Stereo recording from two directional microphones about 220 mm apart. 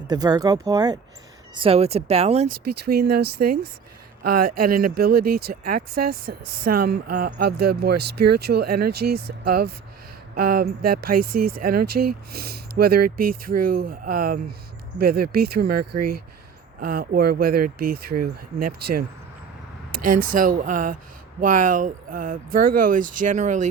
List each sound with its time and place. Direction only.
0.1 s speech: 15° right (ahead or behind)
2.6 s speech: 45° right (ahead or behind)